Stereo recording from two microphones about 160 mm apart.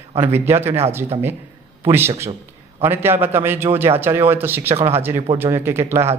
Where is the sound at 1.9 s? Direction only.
15° right (ahead or behind).